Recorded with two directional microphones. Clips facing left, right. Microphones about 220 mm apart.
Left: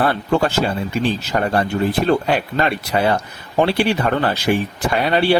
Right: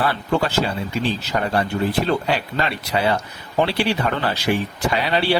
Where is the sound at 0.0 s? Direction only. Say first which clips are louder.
Left 3 dB; 50° left (ahead or behind).